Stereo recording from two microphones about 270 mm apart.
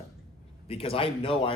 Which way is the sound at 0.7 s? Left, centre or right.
Left.